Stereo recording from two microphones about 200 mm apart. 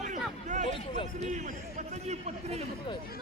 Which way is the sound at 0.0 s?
35° right (ahead or behind).